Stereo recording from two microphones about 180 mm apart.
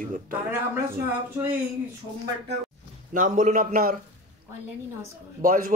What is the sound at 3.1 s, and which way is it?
Speech, 45° right (ahead or behind).